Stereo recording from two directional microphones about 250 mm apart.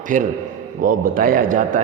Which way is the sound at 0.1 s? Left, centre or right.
Right.